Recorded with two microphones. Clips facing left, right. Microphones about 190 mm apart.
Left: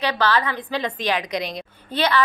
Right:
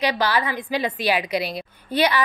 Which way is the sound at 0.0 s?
10° right (ahead or behind).